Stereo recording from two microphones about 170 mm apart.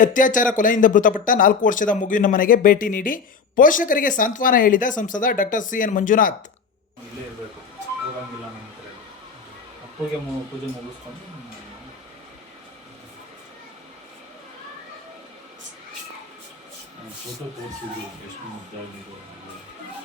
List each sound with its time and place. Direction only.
0.0 s speech: 50° left (ahead or behind)